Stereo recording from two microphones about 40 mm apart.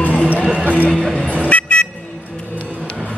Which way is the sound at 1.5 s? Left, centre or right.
Left.